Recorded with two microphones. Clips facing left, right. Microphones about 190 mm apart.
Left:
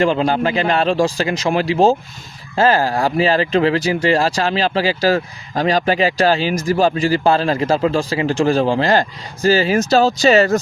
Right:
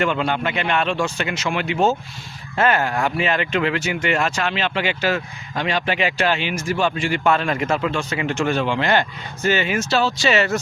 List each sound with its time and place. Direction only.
0.0 s speech: 30° left (ahead or behind)